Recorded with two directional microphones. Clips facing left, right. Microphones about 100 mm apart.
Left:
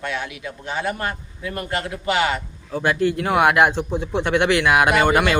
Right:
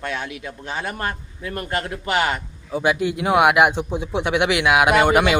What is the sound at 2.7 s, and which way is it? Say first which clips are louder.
Speech: left 1 dB; 10° right (ahead or behind).